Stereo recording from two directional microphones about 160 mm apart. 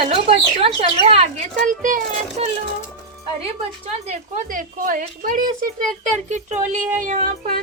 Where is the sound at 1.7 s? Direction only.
60° right (ahead or behind).